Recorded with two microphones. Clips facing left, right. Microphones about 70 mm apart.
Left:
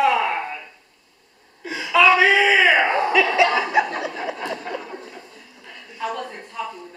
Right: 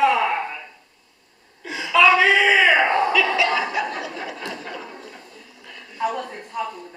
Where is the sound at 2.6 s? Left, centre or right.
Centre.